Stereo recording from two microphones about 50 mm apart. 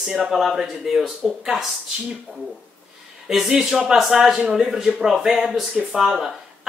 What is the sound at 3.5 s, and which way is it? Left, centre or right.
Speech, centre.